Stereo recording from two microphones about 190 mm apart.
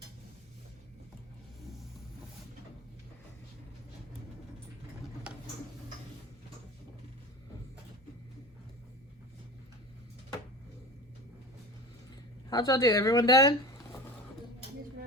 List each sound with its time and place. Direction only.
12.5 s speech: 20° left (ahead or behind)